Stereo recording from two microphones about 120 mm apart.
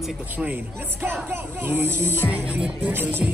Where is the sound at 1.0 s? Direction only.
20° right (ahead or behind).